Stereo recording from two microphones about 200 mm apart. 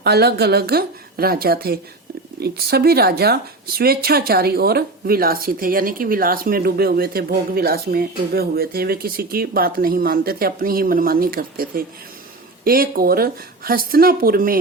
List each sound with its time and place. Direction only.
0.0 s speech: 55° right (ahead or behind)